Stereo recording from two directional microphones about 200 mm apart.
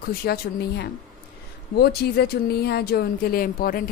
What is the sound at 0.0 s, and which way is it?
Speech, 50° left (ahead or behind).